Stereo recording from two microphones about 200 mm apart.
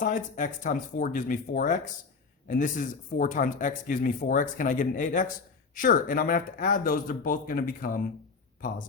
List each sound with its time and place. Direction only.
0.0 s speech: 40° left (ahead or behind)